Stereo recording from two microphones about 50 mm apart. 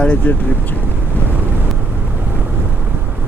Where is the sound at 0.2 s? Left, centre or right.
Left.